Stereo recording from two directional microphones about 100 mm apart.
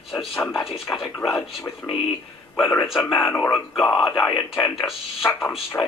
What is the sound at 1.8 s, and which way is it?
Speech, 35° left (ahead or behind).